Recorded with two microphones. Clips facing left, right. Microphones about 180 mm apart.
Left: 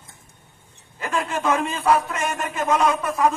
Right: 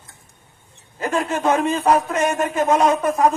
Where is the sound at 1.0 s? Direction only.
40° right (ahead or behind).